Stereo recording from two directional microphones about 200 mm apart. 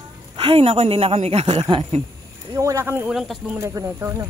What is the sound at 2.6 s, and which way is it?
Speech, 15° right (ahead or behind).